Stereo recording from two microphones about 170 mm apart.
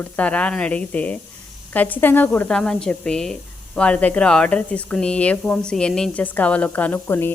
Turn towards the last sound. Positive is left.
turn(degrees=10)  # may be behind; listen again after turning